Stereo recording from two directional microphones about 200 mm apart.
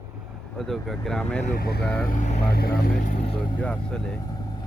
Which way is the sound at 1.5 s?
50° left (ahead or behind).